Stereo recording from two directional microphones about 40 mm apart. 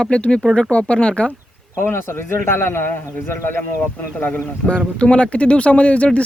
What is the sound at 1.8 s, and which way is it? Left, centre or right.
Speech, left.